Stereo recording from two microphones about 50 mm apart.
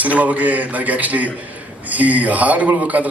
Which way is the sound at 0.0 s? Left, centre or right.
Right.